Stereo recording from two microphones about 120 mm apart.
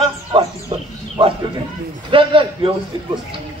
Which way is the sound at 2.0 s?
45° right (ahead or behind).